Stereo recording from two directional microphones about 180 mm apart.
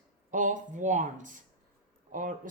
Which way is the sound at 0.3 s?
45° right (ahead or behind).